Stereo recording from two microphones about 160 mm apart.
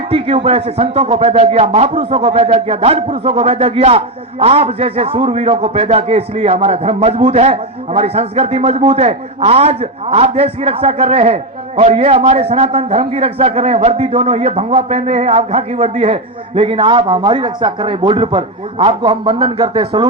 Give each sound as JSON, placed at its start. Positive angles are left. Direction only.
{"t": 0.1, "sound": "speech", "side_deg": -35}